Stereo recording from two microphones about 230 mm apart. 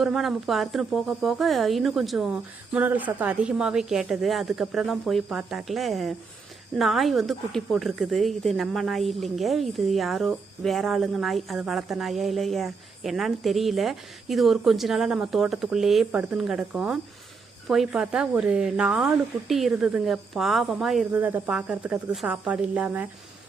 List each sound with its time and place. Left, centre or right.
0.0 s speech: centre